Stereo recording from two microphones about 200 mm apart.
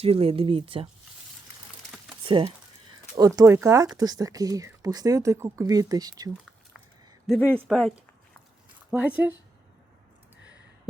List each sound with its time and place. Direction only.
0.0 s speech: 30° right (ahead or behind)
2.2 s speech: 25° right (ahead or behind)
7.3 s speech: 5° left (ahead or behind)